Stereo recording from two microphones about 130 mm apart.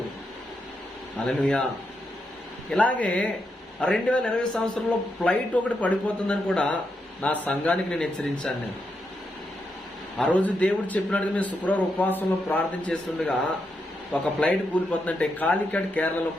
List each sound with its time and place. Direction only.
1.2 s a man's voice: 10° left (ahead or behind)
2.6 s a man's voice: 10° left (ahead or behind)
10.2 s a man's voice: 10° left (ahead or behind)